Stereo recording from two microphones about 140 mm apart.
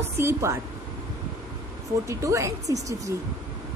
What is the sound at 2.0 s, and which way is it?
Speech, 20° right (ahead or behind).